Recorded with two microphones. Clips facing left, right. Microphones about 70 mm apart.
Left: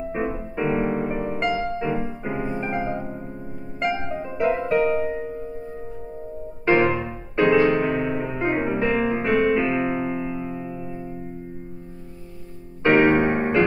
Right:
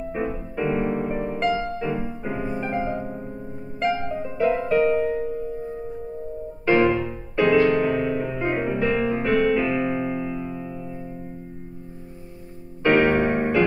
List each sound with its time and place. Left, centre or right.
0.1 s music: left
3.1 s music: centre
3.8 s music: left
6.6 s music: left
12.8 s music: left